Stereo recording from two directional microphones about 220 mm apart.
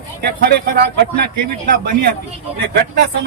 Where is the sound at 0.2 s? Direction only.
45° right (ahead or behind).